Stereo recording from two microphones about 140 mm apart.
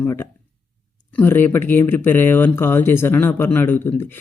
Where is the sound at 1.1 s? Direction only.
15° left (ahead or behind).